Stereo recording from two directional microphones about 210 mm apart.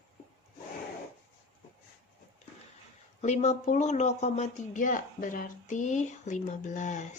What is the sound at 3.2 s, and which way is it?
Speech, 35° left (ahead or behind).